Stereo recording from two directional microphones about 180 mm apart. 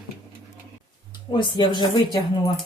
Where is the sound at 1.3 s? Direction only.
25° left (ahead or behind).